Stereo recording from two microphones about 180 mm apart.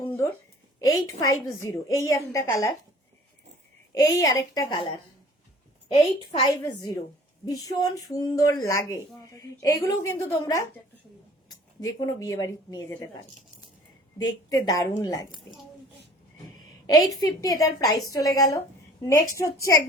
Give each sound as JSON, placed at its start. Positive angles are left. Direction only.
{"t": 0.0, "sound": "a sound", "side_deg": 15}
{"t": 0.8, "sound": "a woman's voice", "side_deg": 20}
{"t": 3.9, "sound": "a woman's voice", "side_deg": 20}
{"t": 5.9, "sound": "a woman's voice", "side_deg": 35}
{"t": 6.5, "sound": "a woman's voice", "side_deg": 20}
{"t": 14.2, "sound": "a woman's voice", "side_deg": 20}
{"t": 17.2, "sound": "a woman's voice", "side_deg": 20}